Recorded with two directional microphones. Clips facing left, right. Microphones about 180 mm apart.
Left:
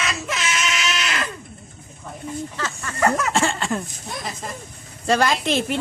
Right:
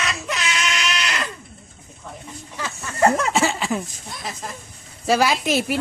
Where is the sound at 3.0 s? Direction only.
25° right (ahead or behind).